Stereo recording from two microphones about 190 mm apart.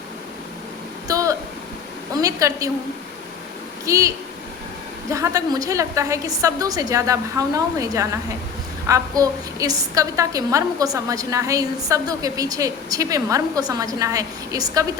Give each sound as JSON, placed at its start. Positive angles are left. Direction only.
{"t": 1.0, "sound": "a sound", "side_deg": -15}
{"t": 2.1, "sound": "a woman's voice", "side_deg": -20}
{"t": 3.8, "sound": "a woman's voice", "side_deg": -15}
{"t": 5.1, "sound": "a woman's voice", "side_deg": -15}